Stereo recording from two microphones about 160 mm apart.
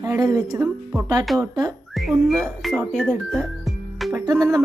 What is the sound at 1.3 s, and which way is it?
Speech, centre (ahead or behind).